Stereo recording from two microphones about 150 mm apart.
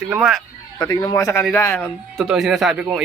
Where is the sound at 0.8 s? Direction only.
25° left (ahead or behind).